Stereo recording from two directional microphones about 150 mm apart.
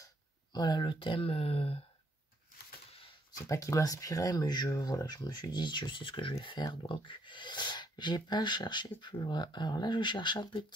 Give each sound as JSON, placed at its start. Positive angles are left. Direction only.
{"t": 0.0, "sound": "speech", "side_deg": 30}
{"t": 3.4, "sound": "speech", "side_deg": 20}